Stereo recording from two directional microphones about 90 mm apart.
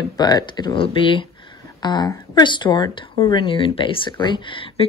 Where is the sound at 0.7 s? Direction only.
80° left.